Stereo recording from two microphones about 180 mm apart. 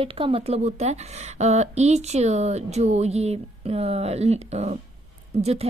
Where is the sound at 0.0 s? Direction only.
30° right (ahead or behind).